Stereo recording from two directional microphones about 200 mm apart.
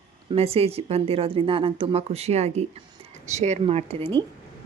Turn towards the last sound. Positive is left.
turn(degrees=-30)  # may be behind; listen again after turning